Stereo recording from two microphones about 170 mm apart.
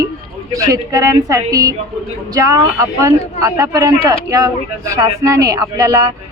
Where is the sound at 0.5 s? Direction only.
20° right (ahead or behind).